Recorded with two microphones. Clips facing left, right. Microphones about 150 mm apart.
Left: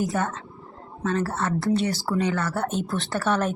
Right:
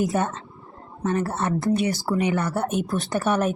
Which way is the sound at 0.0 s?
20° right (ahead or behind).